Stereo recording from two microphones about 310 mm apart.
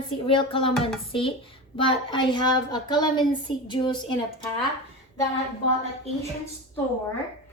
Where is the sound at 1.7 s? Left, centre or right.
Centre.